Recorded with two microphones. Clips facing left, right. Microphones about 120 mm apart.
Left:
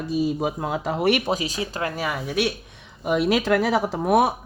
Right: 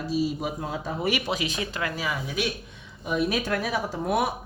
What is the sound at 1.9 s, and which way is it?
Speech, 55° left (ahead or behind).